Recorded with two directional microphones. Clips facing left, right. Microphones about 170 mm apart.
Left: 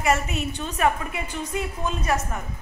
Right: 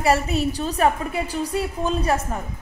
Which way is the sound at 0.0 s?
35° right (ahead or behind).